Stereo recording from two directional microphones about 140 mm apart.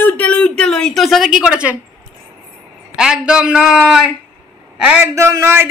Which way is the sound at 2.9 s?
5° right (ahead or behind).